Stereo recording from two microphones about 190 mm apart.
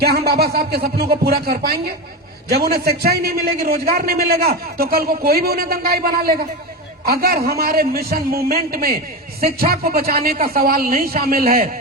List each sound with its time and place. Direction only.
0.0 s a man's voice: 55° right (ahead or behind)